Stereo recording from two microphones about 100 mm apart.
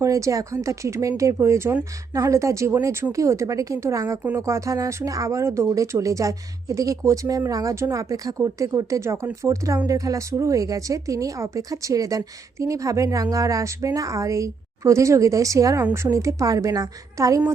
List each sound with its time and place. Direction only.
0.0 s a woman's voice: 35° right (ahead or behind)